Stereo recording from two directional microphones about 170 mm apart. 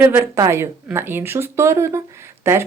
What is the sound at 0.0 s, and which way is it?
Speech, 10° right (ahead or behind).